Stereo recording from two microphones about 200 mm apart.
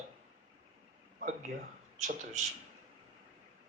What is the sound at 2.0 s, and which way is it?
Speech, 35° right (ahead or behind).